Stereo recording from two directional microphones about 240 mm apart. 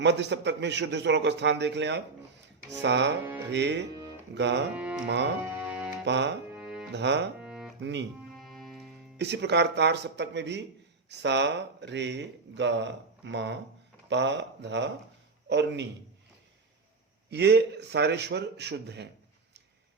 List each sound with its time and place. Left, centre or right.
0.0 s speech: right
4.7 s music: centre
5.0 s speech: right
5.6 s music: centre
6.1 s speech: right
6.5 s music: centre
6.9 s speech: right
7.4 s music: centre
7.8 s speech: right
8.4 s music: centre
9.1 s speech: right
17.3 s speech: right